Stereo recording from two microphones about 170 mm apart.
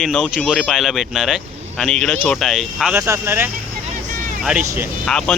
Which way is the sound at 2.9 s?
15° right (ahead or behind).